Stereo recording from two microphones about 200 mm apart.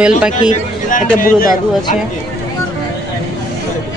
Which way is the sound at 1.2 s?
45° left (ahead or behind).